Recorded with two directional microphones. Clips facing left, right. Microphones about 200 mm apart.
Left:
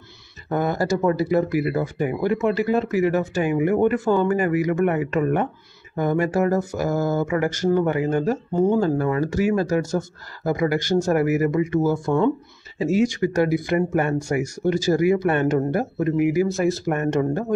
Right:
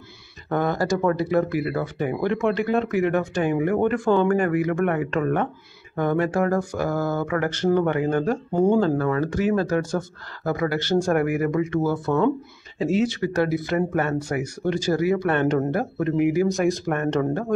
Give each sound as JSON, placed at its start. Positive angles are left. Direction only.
{"t": 0.5, "sound": "speech", "side_deg": 10}